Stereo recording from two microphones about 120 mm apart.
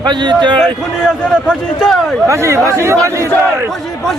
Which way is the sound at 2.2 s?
25° right (ahead or behind).